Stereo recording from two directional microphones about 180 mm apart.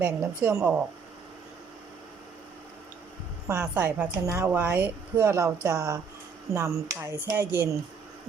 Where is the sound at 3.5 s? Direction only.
5° right (ahead or behind).